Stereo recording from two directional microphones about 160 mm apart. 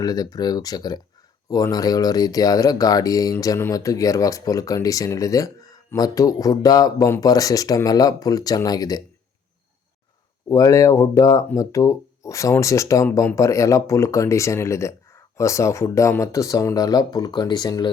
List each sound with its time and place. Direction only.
0.0 s speech: 25° left (ahead or behind)
10.5 s speech: 20° left (ahead or behind)